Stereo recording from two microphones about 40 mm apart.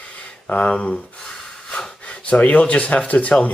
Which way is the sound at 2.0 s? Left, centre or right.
Left.